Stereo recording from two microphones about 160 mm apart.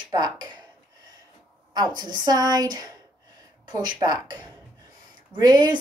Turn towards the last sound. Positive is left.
turn(degrees=-25)  # may be behind; listen again after turning